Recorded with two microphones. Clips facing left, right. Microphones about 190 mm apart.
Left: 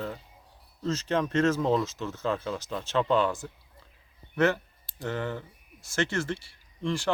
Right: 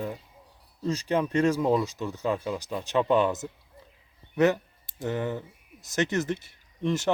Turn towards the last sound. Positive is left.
turn(degrees=-20)  # may be behind; listen again after turning